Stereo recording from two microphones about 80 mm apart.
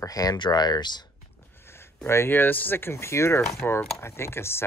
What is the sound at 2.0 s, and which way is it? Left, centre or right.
Speech, left.